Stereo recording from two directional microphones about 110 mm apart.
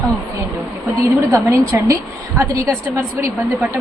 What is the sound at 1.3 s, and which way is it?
A woman's voice, 30° right (ahead or behind).